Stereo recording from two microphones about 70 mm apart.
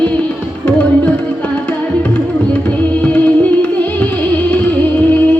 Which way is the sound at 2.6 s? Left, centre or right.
Centre.